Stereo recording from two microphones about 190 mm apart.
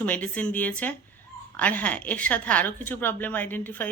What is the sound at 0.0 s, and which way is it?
Speech, 5° left (ahead or behind).